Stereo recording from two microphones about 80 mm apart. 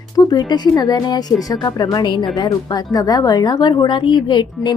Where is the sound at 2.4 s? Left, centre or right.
Left.